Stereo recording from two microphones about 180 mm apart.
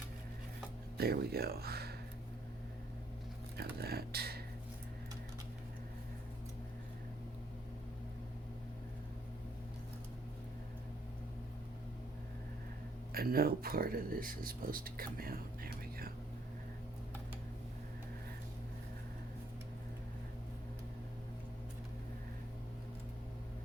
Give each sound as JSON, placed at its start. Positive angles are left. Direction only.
{"t": 0.9, "sound": "speech", "side_deg": -60}
{"t": 3.6, "sound": "speech", "side_deg": -60}
{"t": 13.1, "sound": "speech", "side_deg": -55}